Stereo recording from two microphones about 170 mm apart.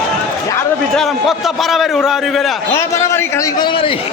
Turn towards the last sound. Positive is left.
turn(degrees=20)  # may be behind; listen again after turning